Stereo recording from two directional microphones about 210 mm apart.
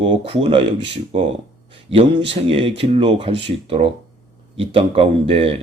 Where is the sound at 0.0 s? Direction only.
25° right (ahead or behind).